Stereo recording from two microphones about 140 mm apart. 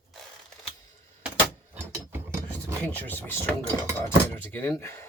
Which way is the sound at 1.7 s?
15° right (ahead or behind).